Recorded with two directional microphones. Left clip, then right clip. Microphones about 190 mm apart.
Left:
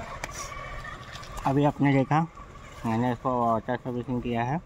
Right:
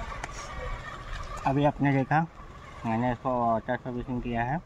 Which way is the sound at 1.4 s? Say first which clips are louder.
Left 1 dB; 20° left (ahead or behind).